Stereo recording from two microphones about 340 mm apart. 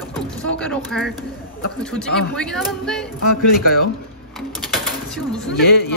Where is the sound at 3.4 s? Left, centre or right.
Left.